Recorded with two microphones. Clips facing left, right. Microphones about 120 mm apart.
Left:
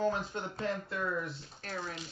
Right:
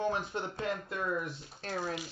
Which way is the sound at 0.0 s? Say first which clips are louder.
Even; 15° right (ahead or behind).